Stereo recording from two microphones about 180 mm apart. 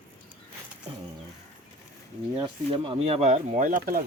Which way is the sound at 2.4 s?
25° right (ahead or behind).